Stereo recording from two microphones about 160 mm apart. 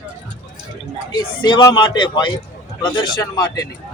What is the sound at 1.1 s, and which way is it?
Speech, 25° left (ahead or behind).